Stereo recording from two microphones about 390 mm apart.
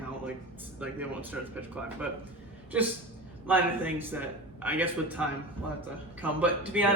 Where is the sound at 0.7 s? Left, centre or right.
Centre.